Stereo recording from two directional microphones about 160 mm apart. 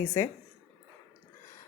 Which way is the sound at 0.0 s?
15° left (ahead or behind).